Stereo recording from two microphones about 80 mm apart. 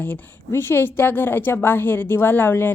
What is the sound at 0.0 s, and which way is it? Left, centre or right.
A woman's voice, left.